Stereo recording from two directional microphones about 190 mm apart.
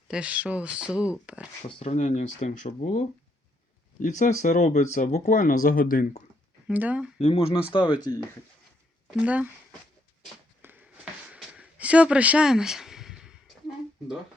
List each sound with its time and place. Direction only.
0.1 s speech: 5° right (ahead or behind)
1.8 s speech: 40° left (ahead or behind)
6.7 s speech: 5° right (ahead or behind)
7.2 s speech: 30° left (ahead or behind); by 8.3 s 15° left (ahead or behind)
9.0 s speech: 5° right (ahead or behind)
10.6 s a sound: 10° right (ahead or behind)